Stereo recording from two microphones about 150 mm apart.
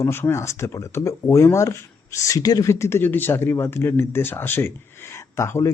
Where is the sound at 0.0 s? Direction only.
15° left (ahead or behind).